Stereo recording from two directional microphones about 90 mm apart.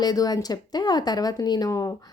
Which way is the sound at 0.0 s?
45° left (ahead or behind).